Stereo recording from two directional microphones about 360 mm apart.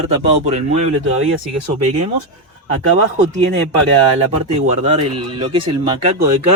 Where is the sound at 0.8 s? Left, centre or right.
Right.